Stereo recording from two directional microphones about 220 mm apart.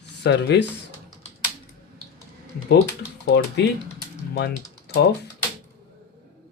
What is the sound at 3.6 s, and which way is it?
Speech, 50° left (ahead or behind).